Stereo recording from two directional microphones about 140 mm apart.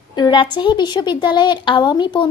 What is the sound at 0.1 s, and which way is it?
A woman's voice, 35° left (ahead or behind).